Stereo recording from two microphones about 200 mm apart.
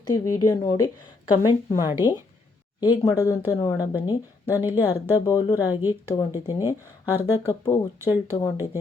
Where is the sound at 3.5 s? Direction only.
15° left (ahead or behind).